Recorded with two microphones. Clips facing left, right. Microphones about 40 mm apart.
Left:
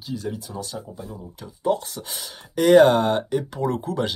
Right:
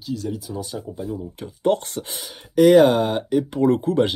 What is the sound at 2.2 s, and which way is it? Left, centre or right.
Speech, centre.